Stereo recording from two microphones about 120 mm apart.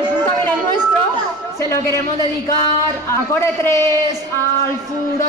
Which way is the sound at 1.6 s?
25° left (ahead or behind).